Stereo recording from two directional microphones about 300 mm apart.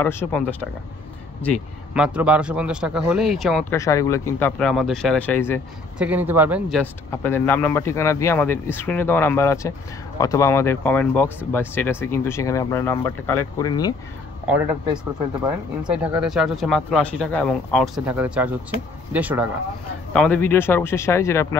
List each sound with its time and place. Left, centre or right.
0.0 s speech: centre
3.7 s speech: centre
5.9 s speech: centre
15.4 s speech: centre